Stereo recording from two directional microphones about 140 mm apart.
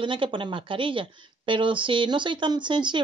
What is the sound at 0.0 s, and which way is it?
A woman's voice, 35° right (ahead or behind).